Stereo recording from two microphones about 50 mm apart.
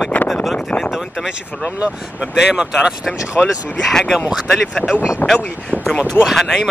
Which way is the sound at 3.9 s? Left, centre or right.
Centre.